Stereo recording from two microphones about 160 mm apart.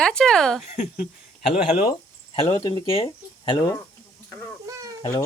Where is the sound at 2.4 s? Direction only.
25° left (ahead or behind).